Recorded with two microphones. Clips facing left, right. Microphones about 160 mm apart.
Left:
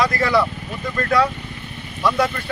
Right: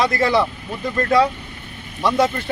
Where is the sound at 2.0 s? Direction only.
25° right (ahead or behind).